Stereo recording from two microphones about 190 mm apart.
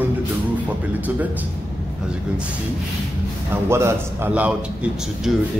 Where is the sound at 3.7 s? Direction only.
15° right (ahead or behind).